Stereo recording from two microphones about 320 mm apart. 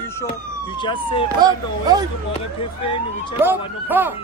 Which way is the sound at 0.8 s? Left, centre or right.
Centre.